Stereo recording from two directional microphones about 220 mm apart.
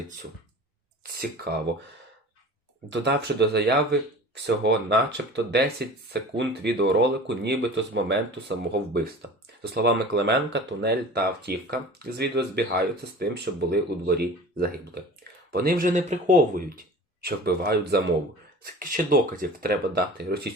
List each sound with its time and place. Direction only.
2.9 s speech: 50° right (ahead or behind)